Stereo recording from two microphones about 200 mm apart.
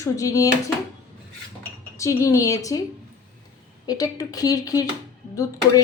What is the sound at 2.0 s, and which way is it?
Speech, 15° left (ahead or behind).